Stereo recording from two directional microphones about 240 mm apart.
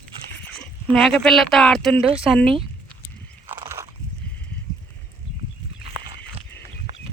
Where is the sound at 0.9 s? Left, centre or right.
Centre.